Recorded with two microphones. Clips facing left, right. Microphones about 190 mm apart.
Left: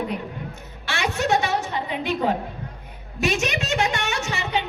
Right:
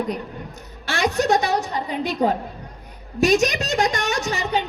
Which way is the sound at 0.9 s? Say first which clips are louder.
Right 3 dB; 40° right (ahead or behind).